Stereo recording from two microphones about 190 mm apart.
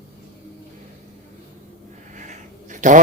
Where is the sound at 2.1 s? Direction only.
40° right (ahead or behind).